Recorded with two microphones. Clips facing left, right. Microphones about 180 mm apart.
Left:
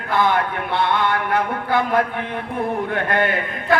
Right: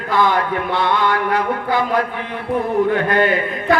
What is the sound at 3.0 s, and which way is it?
Speech, 55° left (ahead or behind).